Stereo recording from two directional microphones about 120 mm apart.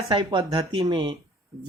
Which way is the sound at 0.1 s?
40° right (ahead or behind).